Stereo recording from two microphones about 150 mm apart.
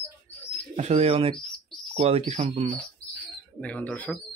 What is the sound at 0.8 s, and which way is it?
Speech, 45° right (ahead or behind).